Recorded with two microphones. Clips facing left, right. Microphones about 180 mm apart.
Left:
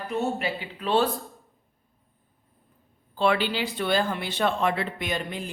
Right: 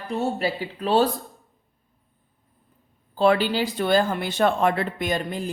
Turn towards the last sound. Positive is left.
turn(degrees=-40)  # may be behind; listen again after turning